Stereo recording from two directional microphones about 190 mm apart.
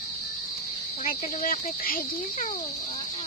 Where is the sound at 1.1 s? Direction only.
45° left (ahead or behind).